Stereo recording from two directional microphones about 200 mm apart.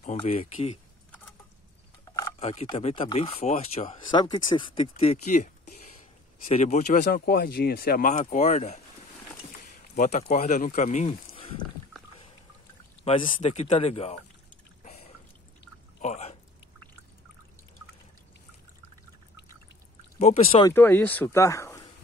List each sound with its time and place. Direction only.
0.0 s speech: 35° left (ahead or behind)
2.0 s a sound: 20° left (ahead or behind)
2.4 s speech: 30° left (ahead or behind)
13.0 s speech: 30° left (ahead or behind)
14.8 s drip: 30° left (ahead or behind)
16.0 s a sound: 35° left (ahead or behind)
20.2 s speech: 30° left (ahead or behind)
20.6 s speech: 10° left (ahead or behind)